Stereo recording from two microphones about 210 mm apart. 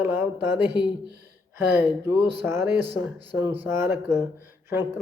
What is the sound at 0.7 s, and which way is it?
Speech, 55° right (ahead or behind).